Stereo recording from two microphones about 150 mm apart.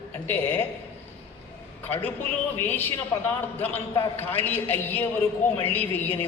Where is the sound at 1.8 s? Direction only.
15° left (ahead or behind).